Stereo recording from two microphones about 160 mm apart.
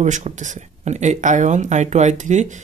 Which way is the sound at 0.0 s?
50° right (ahead or behind).